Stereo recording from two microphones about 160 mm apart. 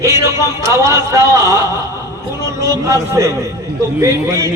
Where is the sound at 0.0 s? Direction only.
20° right (ahead or behind).